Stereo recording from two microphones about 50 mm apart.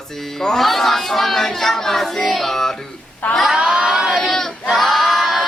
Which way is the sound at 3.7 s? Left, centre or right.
Centre.